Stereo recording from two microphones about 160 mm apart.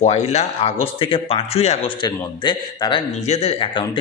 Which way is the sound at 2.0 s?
30° left (ahead or behind).